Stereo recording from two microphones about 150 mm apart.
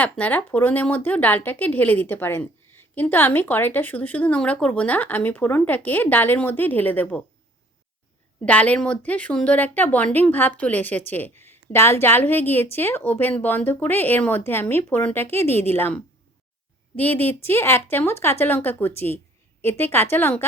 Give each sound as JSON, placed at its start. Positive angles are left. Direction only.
{"t": 0.0, "sound": "speech", "side_deg": 10}
{"t": 8.4, "sound": "speech", "side_deg": 10}